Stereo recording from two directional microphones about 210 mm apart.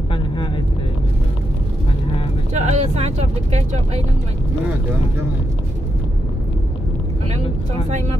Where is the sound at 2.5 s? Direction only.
35° right (ahead or behind).